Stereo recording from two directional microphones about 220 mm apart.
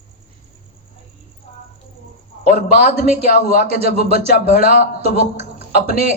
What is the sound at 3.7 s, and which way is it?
Speech, 30° right (ahead or behind).